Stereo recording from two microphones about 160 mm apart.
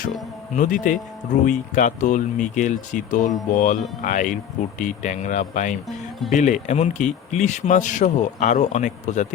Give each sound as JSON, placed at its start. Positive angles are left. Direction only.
{"t": 0.5, "sound": "speech", "side_deg": 55}